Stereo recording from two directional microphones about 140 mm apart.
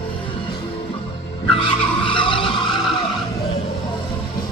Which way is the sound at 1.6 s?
35° left (ahead or behind).